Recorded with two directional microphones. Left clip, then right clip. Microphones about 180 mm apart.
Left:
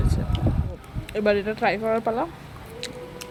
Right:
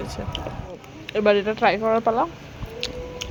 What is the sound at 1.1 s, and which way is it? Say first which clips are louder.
Speech: right 3 dB; 5° left (ahead or behind).